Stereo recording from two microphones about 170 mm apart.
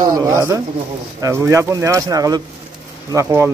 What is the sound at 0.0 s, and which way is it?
Speech, 20° right (ahead or behind).